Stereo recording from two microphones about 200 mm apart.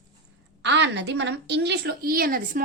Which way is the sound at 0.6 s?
60° right (ahead or behind).